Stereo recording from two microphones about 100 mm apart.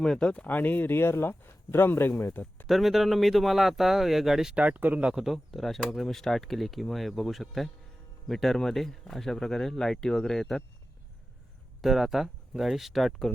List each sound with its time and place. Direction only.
0.0 s speech: 5° left (ahead or behind)
2.6 s speech: centre (ahead or behind)
11.8 s speech: centre (ahead or behind)